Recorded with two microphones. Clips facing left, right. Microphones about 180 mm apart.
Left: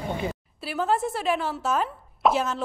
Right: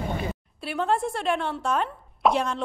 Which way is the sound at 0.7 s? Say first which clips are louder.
Even; 5° left (ahead or behind).